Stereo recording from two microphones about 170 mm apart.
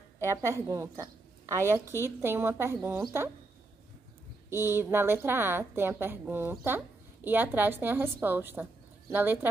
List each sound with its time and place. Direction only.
0.2 s a woman's voice: 15° right (ahead or behind)
4.5 s a woman's voice: 15° right (ahead or behind)